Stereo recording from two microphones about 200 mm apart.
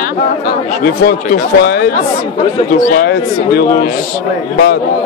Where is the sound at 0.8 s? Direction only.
50° left (ahead or behind).